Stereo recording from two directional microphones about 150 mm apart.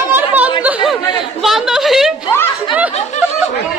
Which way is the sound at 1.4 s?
Centre (ahead or behind).